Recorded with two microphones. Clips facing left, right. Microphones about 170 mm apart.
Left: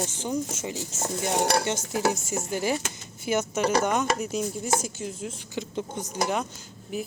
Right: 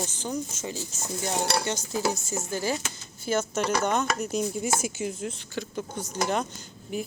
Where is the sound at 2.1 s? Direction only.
20° left (ahead or behind); by 5.2 s 5° right (ahead or behind).